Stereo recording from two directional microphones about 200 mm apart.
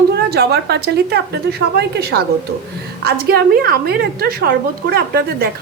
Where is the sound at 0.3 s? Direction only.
55° right (ahead or behind).